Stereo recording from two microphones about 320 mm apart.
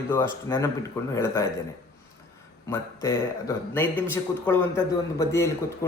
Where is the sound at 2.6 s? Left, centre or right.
Centre.